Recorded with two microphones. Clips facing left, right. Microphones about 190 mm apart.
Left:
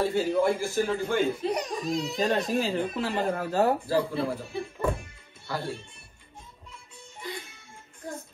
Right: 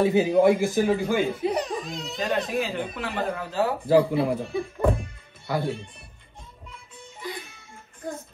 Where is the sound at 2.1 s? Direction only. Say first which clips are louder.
Right 2 dB; 30° left (ahead or behind).